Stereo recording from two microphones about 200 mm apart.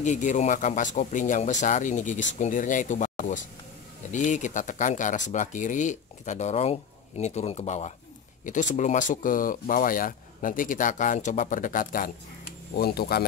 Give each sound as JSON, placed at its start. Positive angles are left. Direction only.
{"t": 0.0, "sound": "speech", "side_deg": 35}